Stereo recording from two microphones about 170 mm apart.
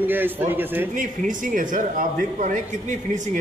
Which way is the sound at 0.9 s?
50° right (ahead or behind).